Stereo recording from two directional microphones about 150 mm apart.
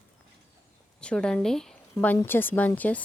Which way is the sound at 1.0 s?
5° left (ahead or behind).